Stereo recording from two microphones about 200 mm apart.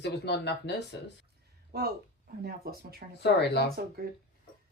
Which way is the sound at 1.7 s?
50° right (ahead or behind).